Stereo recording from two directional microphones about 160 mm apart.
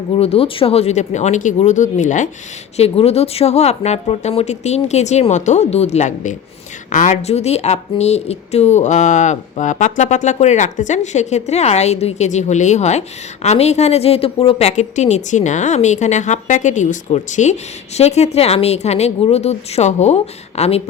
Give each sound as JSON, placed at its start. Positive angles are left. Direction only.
{"t": 0.2, "sound": "speech", "side_deg": 35}
{"t": 2.7, "sound": "speech", "side_deg": 40}